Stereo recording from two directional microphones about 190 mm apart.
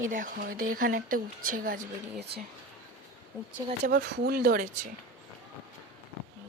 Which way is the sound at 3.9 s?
55° right (ahead or behind).